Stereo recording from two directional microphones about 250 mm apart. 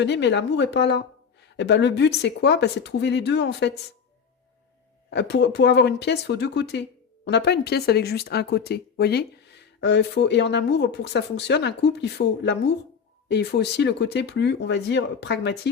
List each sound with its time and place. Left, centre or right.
0.0 s speech: left
5.1 s speech: left